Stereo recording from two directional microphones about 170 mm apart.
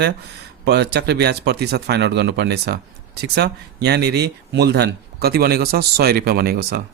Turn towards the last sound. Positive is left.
turn(degrees=-65)  # may be behind; listen again after turning